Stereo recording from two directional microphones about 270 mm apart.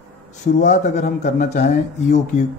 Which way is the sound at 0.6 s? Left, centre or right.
Left.